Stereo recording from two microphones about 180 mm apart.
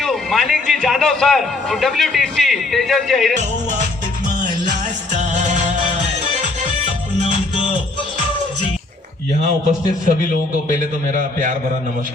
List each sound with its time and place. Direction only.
0.0 s a man's voice: centre (ahead or behind)
3.3 s music: 40° right (ahead or behind)
5.1 s music: 40° right (ahead or behind)
9.6 s a man's voice: 40° right (ahead or behind)